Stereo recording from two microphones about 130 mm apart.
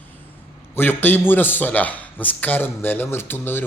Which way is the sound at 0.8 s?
15° left (ahead or behind).